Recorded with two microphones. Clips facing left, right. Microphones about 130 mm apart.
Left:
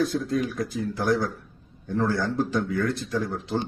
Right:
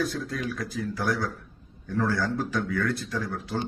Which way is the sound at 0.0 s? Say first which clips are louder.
Left 5 dB; 25° left (ahead or behind).